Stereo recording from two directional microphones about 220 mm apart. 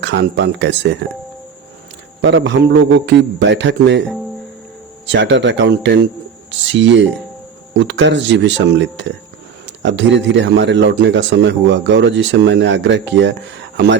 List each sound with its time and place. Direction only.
0.0 s a man's voice: 50° right (ahead or behind)
2.2 s a man's voice: 55° right (ahead or behind)
5.0 s a man's voice: 55° right (ahead or behind)